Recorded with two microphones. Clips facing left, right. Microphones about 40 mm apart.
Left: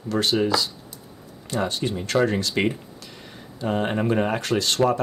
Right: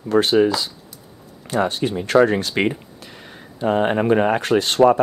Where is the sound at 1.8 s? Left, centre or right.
Right.